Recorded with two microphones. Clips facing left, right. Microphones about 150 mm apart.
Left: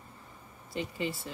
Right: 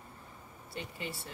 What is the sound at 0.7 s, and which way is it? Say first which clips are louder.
Speech: left 7 dB; 90° left.